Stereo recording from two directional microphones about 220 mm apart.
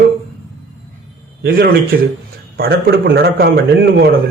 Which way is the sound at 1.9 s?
45° right (ahead or behind).